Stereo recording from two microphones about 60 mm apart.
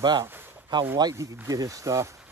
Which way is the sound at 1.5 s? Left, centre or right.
Right.